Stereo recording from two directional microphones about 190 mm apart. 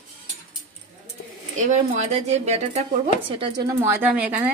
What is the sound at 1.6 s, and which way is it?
Speech, 40° right (ahead or behind).